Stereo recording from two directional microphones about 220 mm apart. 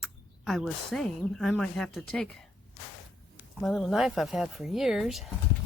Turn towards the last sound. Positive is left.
turn(degrees=0)  # may be behind; listen again after turning